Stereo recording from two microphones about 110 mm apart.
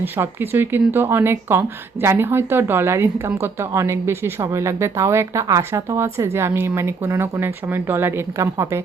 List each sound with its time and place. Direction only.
0.0 s speech: 20° right (ahead or behind)